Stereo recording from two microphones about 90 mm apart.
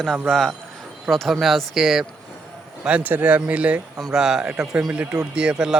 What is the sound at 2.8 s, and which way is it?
Speech, 15° right (ahead or behind).